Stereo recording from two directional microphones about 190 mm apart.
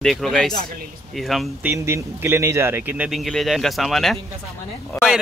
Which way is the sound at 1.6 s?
15° right (ahead or behind).